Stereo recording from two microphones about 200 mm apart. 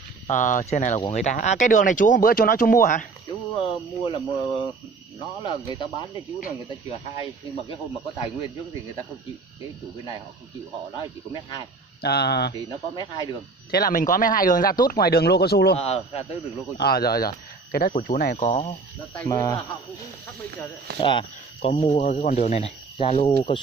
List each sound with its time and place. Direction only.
0.3 s speech: 40° left (ahead or behind)
3.3 s a sound: 30° left (ahead or behind)
5.4 s speech: 25° left (ahead or behind)
12.0 s speech: 55° left (ahead or behind)
12.6 s speech: 20° left (ahead or behind)
13.7 s speech: 45° left (ahead or behind)
15.7 s speech: 30° left (ahead or behind)
16.7 s speech: 50° left (ahead or behind)
19.2 s speech: 15° left (ahead or behind)
21.0 s speech: 25° left (ahead or behind)